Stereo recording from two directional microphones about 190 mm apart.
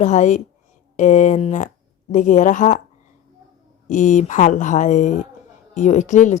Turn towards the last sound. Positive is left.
turn(degrees=40)  # may be behind; listen again after turning